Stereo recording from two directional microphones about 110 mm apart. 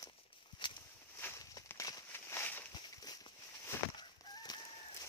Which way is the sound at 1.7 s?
30° left (ahead or behind).